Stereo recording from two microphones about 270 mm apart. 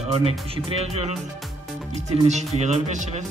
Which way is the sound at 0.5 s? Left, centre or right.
Right.